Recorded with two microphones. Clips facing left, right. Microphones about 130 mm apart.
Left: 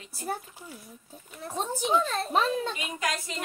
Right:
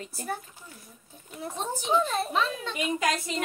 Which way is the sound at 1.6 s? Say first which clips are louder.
Left 1 dB; 40° left (ahead or behind).